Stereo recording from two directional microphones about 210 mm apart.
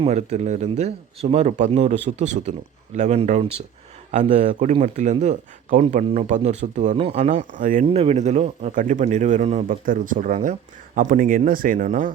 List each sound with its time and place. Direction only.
0.0 s speech: 30° right (ahead or behind)